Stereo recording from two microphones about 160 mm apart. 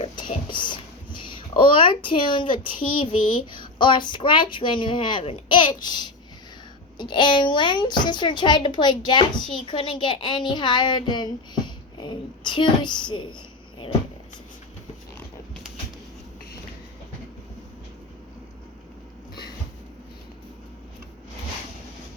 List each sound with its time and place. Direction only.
0.5 s a child's voice: 30° left (ahead or behind)